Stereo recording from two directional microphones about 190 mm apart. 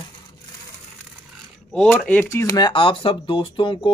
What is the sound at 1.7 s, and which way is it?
Speech, 10° left (ahead or behind).